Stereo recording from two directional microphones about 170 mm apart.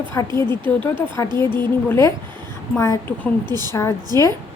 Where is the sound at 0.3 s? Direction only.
10° left (ahead or behind).